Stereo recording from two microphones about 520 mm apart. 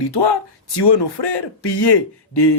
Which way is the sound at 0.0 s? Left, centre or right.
Left.